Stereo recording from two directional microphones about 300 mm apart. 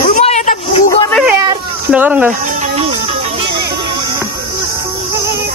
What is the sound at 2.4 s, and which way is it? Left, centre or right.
Music, right.